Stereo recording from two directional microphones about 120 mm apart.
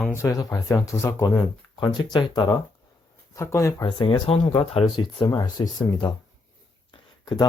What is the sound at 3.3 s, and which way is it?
Speech, 25° left (ahead or behind).